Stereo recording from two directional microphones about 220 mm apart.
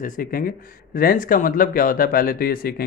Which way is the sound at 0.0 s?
40° left (ahead or behind).